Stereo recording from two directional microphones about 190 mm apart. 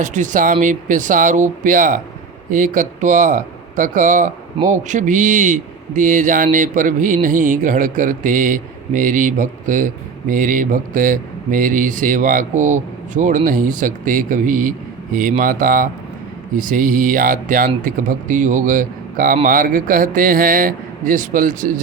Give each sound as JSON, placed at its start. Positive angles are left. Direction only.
{"t": 0.0, "sound": "speech", "side_deg": -40}